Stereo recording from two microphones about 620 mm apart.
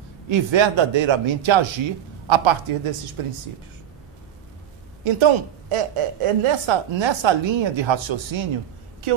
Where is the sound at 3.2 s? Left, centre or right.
Right.